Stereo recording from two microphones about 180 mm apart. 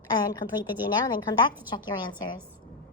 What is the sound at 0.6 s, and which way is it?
A woman's voice, 20° left (ahead or behind).